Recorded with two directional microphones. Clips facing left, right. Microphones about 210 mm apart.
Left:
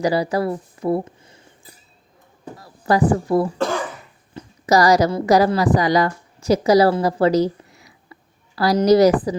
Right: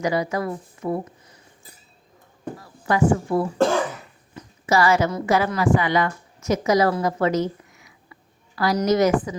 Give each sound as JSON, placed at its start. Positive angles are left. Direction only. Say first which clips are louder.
{"t": 0.0, "sound": "speech", "louder": "left 4 dB", "side_deg": 35}
{"t": 2.6, "sound": "a woman's voice", "louder": "left 3 dB", "side_deg": 35}